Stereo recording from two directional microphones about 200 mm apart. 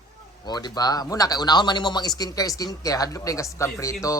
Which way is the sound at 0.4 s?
20° left (ahead or behind).